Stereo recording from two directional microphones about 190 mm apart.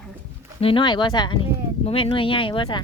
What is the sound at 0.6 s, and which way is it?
Speech, 25° left (ahead or behind).